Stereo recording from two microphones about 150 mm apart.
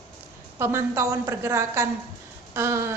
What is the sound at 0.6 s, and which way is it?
A woman's voice, 20° right (ahead or behind).